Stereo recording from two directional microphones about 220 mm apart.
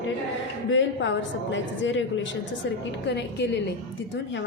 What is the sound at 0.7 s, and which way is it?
A woman's voice, 55° left (ahead or behind).